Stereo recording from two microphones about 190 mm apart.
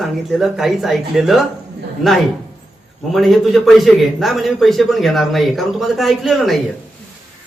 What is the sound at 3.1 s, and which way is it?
A man's voice, centre (ahead or behind).